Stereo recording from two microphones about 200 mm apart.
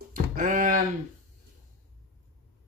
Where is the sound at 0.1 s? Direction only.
45° right (ahead or behind).